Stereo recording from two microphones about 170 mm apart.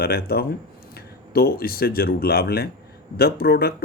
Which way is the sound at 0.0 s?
65° left (ahead or behind).